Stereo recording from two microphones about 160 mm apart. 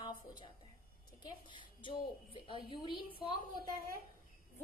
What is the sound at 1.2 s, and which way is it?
A woman's voice, 30° left (ahead or behind).